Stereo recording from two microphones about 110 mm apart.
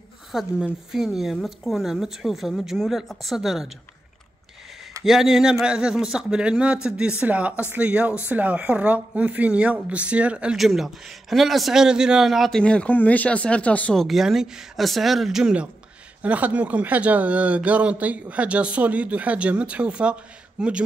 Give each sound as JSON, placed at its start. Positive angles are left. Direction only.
{"t": 0.3, "sound": "speech", "side_deg": 0}
{"t": 5.0, "sound": "speech", "side_deg": -5}
{"t": 14.0, "sound": "speech", "side_deg": 0}